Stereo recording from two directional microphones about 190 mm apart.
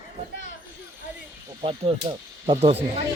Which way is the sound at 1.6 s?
30° right (ahead or behind).